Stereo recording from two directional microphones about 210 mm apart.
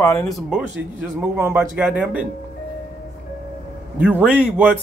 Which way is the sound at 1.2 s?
10° right (ahead or behind).